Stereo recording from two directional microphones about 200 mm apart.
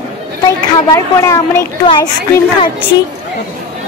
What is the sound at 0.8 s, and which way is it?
A child's voice, 15° left (ahead or behind).